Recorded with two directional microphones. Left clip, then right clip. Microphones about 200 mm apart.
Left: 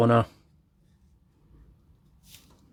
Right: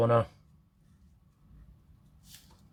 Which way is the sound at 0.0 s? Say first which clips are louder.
Left 4 dB; 55° left (ahead or behind).